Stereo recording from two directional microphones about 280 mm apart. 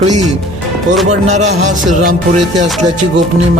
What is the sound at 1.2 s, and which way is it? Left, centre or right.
Speech, right.